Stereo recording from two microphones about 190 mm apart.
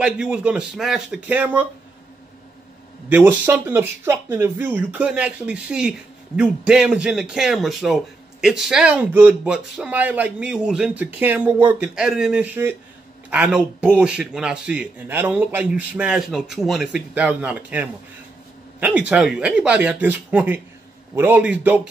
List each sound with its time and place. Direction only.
0.0 s speech: 5° right (ahead or behind)
3.1 s speech: 10° right (ahead or behind)